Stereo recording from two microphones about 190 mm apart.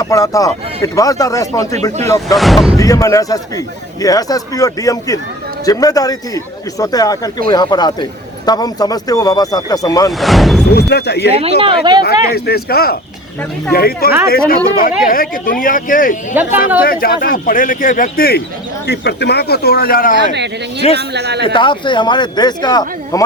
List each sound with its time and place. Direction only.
0.0 s speech: 15° left (ahead or behind)
2.3 s speech: centre (ahead or behind)
2.7 s speech: 15° left (ahead or behind)
10.1 s speech: centre (ahead or behind)
10.7 s speech: 60° left (ahead or behind)
11.3 s speech: 30° right (ahead or behind)
12.3 s speech: 55° left (ahead or behind)
16.4 s speech: 10° right (ahead or behind)
16.8 s speech: 50° left (ahead or behind)
20.3 s speech: 65° right (ahead or behind)
21.4 s speech: 25° left (ahead or behind)